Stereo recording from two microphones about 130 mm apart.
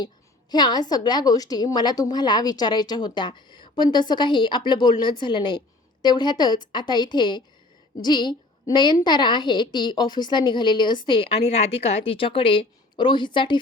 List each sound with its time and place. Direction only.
0.5 s a woman's voice: 30° left (ahead or behind)